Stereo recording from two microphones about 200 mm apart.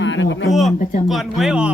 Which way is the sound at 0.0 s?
65° left (ahead or behind).